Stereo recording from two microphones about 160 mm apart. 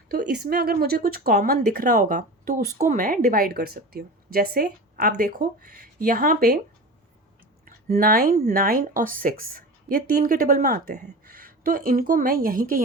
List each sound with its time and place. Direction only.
0.4 s a woman's voice: 70° right (ahead or behind)
7.6 s a sound: 65° right (ahead or behind)
8.4 s a woman's voice: 65° right (ahead or behind)